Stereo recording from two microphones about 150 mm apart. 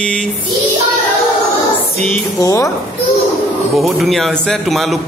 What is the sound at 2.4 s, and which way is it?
Speech, 20° left (ahead or behind).